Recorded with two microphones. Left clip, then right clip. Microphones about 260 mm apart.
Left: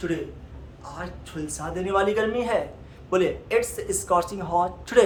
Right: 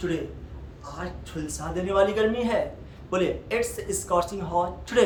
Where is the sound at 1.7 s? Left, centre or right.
Centre.